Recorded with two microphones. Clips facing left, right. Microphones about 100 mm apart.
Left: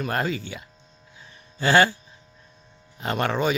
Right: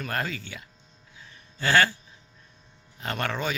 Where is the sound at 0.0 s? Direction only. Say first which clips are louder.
Left 5 dB; 20° left (ahead or behind).